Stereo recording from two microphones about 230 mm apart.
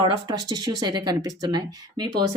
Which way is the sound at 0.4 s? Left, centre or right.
Centre.